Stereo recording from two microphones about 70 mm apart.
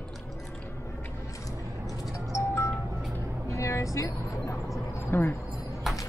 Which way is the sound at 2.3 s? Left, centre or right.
Left.